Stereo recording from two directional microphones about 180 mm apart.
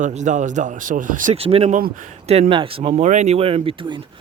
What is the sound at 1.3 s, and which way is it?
Speech, 35° right (ahead or behind).